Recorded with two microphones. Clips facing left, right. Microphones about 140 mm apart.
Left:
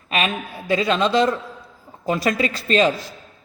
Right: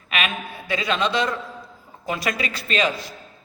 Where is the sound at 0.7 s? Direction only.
35° left (ahead or behind).